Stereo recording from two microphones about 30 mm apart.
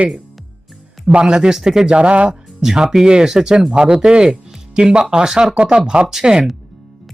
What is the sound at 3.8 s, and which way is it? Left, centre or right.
Speech, right.